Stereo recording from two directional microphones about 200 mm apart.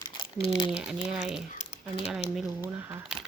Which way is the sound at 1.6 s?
30° left (ahead or behind).